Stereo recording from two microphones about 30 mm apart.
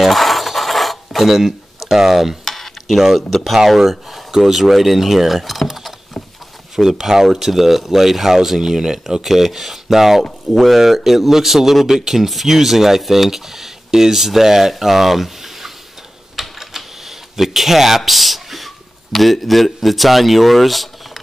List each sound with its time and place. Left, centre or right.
0.0 s a sound: centre
1.9 s speech: centre
2.4 s stir: centre
3.5 s speech: centre
6.8 s speech: centre
12.3 s speech: centre
16.3 s typing: centre
17.4 s speech: centre